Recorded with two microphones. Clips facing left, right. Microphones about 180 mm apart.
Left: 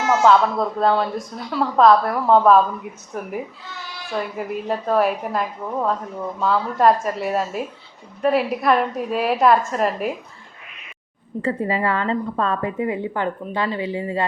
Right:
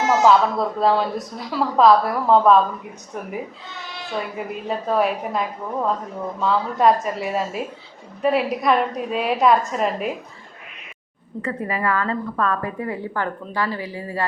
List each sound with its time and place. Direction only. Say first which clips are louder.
0.0 s speech: even; 20° right (ahead or behind)
0.8 s a woman's voice: even; centre (ahead or behind)
11.4 s a woman's voice: left 3 dB; 25° left (ahead or behind)